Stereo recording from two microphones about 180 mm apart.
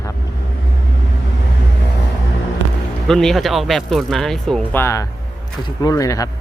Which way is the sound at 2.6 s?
90° right.